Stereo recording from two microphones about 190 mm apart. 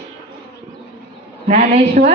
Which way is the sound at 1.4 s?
40° right (ahead or behind).